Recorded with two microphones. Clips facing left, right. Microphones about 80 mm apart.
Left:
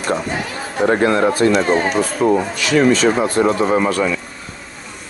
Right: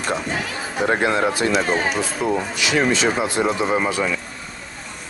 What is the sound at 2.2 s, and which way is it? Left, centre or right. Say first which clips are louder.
Speech: left 7 dB; left.